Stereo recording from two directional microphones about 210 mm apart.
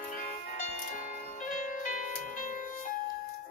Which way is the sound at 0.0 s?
40° left (ahead or behind).